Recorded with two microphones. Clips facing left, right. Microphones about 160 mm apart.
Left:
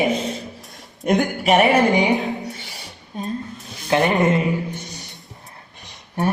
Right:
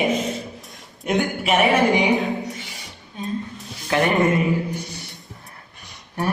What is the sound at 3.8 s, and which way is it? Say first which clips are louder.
Speech: left 1 dB; 20° left (ahead or behind).